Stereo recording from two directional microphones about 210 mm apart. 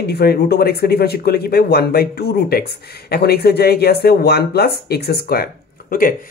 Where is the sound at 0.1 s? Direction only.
50° left (ahead or behind).